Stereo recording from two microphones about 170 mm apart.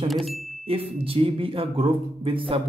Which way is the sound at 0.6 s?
35° right (ahead or behind).